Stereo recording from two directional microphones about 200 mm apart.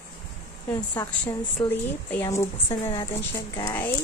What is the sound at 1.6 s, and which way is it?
Speech, 25° left (ahead or behind).